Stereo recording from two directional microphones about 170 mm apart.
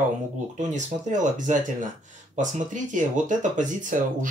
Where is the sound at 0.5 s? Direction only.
45° right (ahead or behind).